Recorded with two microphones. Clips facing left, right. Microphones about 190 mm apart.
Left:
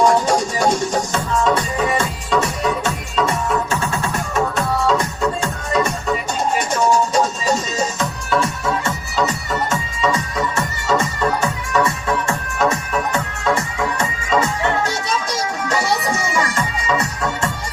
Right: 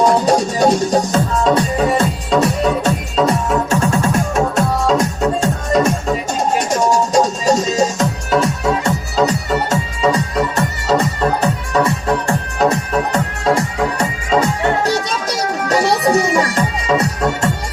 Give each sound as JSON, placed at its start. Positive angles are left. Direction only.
{"t": 0.0, "sound": "music", "side_deg": -35}